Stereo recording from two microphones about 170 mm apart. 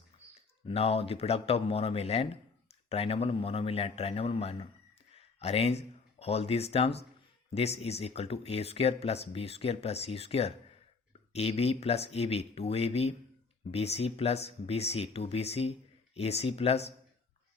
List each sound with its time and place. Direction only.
0.7 s speech: 35° left (ahead or behind)